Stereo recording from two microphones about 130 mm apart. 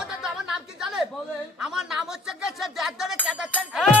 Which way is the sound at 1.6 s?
5° right (ahead or behind).